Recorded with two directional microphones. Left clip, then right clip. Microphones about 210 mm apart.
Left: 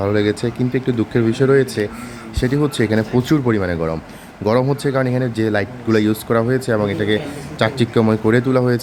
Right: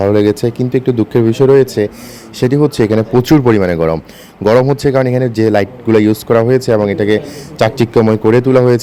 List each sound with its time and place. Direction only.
0.0 s a man's voice: 35° right (ahead or behind)